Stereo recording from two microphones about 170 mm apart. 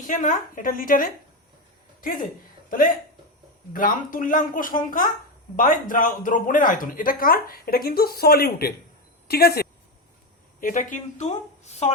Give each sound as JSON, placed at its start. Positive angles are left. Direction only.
{"t": 0.0, "sound": "speech", "side_deg": 50}
{"t": 2.6, "sound": "speech", "side_deg": 55}
{"t": 10.6, "sound": "speech", "side_deg": 50}